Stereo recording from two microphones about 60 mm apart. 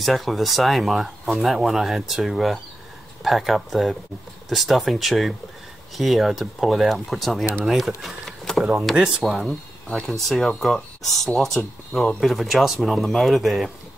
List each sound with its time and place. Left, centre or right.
0.0 s speech: centre